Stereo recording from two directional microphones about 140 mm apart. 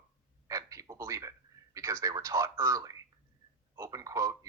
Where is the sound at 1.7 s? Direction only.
25° right (ahead or behind).